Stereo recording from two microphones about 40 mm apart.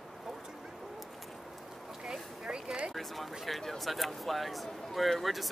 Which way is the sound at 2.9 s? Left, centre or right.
Centre.